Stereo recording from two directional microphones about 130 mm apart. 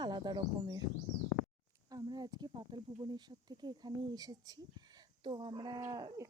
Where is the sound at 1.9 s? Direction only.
30° right (ahead or behind).